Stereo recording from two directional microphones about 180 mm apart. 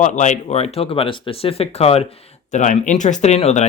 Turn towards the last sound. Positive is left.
turn(degrees=35)  # may be behind; listen again after turning